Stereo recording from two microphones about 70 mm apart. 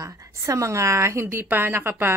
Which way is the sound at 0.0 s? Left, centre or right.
Right.